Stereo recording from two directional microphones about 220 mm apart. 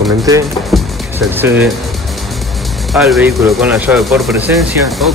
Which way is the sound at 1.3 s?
10° right (ahead or behind).